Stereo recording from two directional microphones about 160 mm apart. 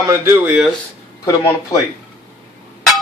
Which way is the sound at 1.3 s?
25° left (ahead or behind).